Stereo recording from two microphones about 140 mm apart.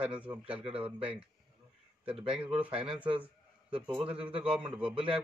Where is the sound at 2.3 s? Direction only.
10° right (ahead or behind).